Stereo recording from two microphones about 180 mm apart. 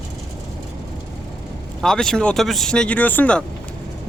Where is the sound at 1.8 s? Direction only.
5° left (ahead or behind).